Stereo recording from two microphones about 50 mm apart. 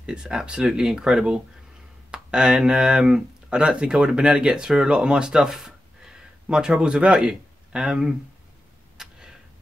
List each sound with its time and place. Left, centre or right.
0.0 s speech: centre
8.9 s tick-tock: centre